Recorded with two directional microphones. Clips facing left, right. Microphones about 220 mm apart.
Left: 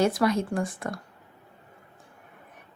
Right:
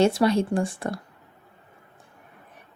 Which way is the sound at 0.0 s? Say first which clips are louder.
Right 3 dB; 30° right (ahead or behind).